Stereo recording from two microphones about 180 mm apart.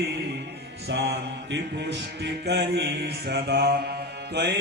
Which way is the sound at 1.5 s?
75° right (ahead or behind).